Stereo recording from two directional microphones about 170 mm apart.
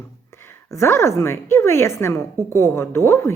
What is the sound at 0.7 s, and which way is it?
A woman's voice, 15° left (ahead or behind).